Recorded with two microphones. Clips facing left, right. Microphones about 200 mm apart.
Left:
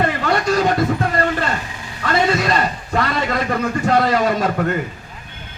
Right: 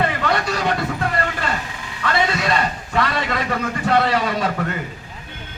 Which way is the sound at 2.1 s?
40° left (ahead or behind).